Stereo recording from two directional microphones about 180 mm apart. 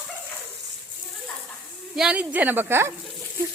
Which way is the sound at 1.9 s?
5° right (ahead or behind).